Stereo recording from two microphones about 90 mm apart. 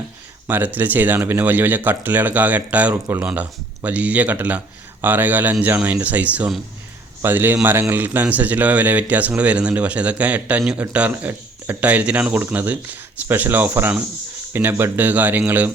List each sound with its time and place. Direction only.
0.4 s a man's voice: 20° right (ahead or behind)